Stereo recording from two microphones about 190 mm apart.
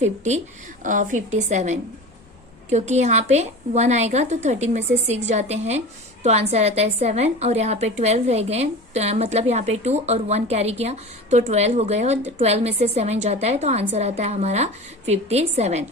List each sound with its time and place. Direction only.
0.0 s a woman's voice: 35° right (ahead or behind)